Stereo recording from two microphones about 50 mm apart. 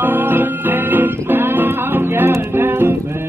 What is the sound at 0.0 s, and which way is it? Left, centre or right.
Music, right.